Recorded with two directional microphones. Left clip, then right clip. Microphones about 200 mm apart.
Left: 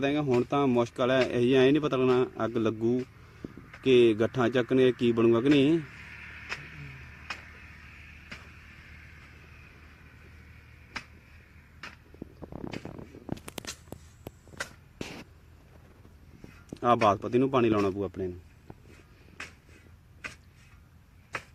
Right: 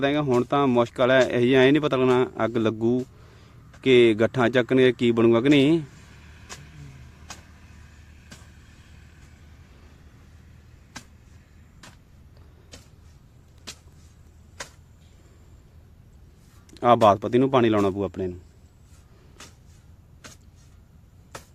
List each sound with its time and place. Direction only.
0.0 s speech: 10° right (ahead or behind)
16.7 s speech: 25° right (ahead or behind)